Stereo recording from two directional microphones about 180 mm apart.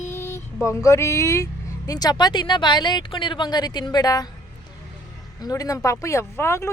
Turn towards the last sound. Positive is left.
turn(degrees=15)  # may be behind; listen again after turning